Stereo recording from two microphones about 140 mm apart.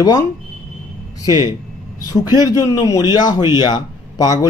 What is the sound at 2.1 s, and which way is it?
A man's voice, 30° left (ahead or behind).